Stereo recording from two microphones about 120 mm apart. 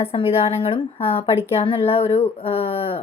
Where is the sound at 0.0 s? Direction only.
55° left (ahead or behind).